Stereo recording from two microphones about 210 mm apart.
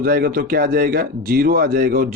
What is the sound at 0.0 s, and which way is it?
Speech, 45° right (ahead or behind).